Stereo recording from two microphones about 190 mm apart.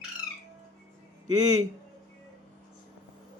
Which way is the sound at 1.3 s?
20° right (ahead or behind).